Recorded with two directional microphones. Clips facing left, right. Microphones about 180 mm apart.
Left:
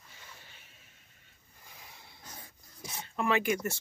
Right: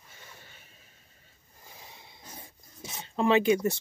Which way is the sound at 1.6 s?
25° right (ahead or behind).